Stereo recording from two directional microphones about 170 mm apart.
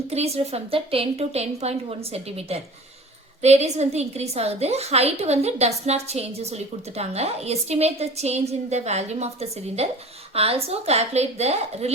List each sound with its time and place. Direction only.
0.1 s a woman's voice: 40° right (ahead or behind)